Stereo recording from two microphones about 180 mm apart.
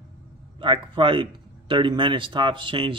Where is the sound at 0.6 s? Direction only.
30° right (ahead or behind).